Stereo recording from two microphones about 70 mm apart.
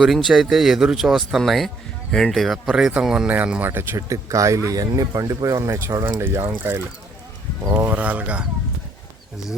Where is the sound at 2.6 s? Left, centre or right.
Centre.